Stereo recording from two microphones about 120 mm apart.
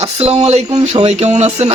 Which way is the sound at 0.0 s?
60° right (ahead or behind).